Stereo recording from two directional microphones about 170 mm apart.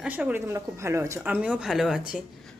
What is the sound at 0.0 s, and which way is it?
A woman's voice, 5° right (ahead or behind).